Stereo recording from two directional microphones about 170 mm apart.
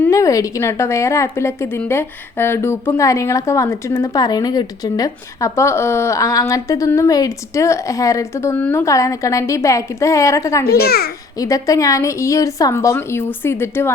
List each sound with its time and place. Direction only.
0.0 s a woman's voice: 20° left (ahead or behind)
10.8 s a child's voice: 65° left (ahead or behind)
11.3 s a woman's voice: 20° left (ahead or behind)